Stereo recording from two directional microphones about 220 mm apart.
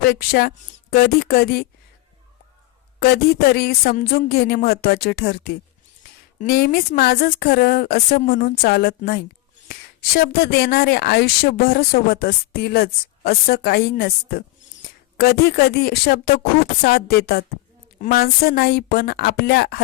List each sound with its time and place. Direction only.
0.0 s speech: 45° left (ahead or behind)
3.0 s speech: 45° left (ahead or behind)